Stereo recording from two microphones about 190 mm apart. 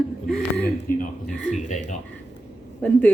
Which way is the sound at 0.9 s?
45° left (ahead or behind).